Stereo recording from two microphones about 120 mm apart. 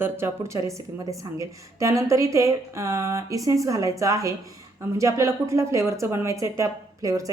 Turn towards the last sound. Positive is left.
turn(degrees=-30)  # may be behind; listen again after turning